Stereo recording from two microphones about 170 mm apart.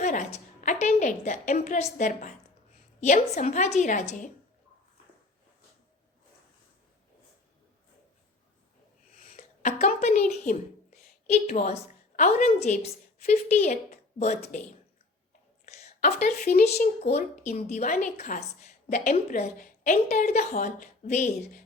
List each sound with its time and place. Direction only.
0.0 s a woman's voice: 45° left (ahead or behind)
9.3 s a woman's voice: 45° left (ahead or behind)
15.6 s a sound: 40° left (ahead or behind)
17.1 s a woman's voice: 40° left (ahead or behind)